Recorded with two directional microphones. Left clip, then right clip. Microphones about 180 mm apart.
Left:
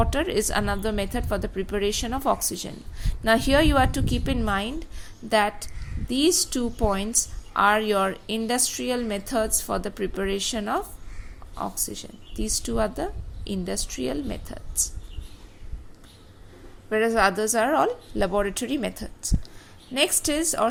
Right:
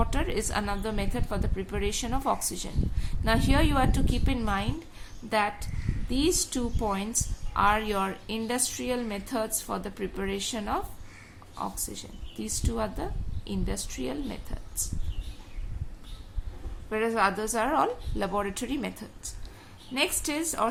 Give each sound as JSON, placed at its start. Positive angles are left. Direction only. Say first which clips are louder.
{"t": 0.0, "sound": "a woman's voice", "louder": "left 6 dB", "side_deg": 30}
{"t": 16.9, "sound": "a woman's voice", "louder": "left 5 dB", "side_deg": 25}